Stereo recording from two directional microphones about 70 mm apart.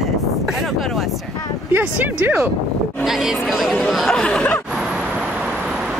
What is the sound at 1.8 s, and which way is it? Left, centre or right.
Speech, right.